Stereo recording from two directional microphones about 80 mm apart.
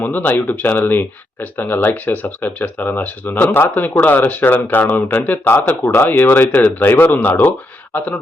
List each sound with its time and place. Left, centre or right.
0.0 s speech: left